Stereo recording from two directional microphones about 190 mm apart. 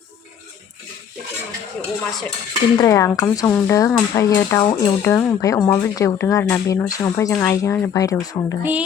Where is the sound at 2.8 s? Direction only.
15° left (ahead or behind).